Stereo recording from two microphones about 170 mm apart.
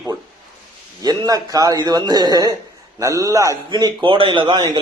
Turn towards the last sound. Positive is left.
turn(degrees=-25)  # may be behind; listen again after turning